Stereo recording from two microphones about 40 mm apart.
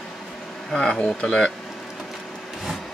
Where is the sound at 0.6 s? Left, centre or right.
Centre.